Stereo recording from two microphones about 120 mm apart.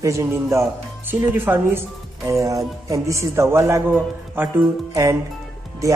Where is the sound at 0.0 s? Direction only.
25° right (ahead or behind).